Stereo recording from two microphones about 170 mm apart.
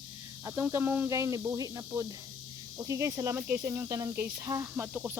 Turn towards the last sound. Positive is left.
turn(degrees=-10)  # may be behind; listen again after turning